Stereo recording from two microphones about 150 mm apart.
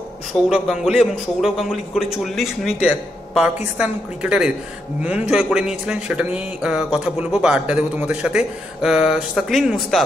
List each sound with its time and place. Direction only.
0.3 s a man's voice: centre (ahead or behind)